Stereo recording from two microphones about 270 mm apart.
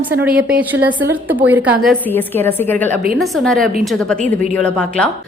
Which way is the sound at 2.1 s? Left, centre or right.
Centre.